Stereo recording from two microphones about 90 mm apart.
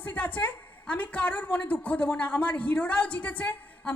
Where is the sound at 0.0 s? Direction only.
20° left (ahead or behind).